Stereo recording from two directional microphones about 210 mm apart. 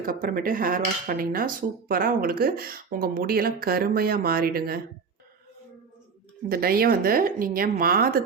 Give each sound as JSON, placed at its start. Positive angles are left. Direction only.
{"t": 0.0, "sound": "speech", "side_deg": -40}
{"t": 6.5, "sound": "speech", "side_deg": -45}